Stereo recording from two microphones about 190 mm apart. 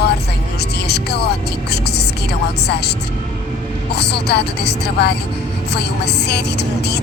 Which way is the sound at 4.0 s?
60° left (ahead or behind).